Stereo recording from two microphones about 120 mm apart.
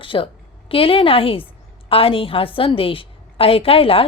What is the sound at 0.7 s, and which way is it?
A woman's voice, 50° left (ahead or behind).